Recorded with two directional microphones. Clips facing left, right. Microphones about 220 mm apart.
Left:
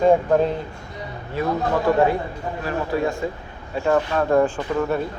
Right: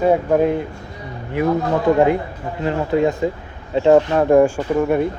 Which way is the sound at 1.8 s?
20° right (ahead or behind).